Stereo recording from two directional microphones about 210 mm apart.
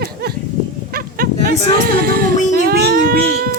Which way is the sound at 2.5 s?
45° right (ahead or behind).